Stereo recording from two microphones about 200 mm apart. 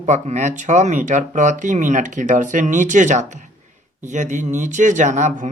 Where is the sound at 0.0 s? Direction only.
35° right (ahead or behind).